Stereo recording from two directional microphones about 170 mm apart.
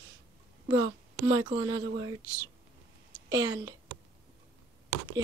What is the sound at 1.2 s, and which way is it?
Speech, 30° right (ahead or behind).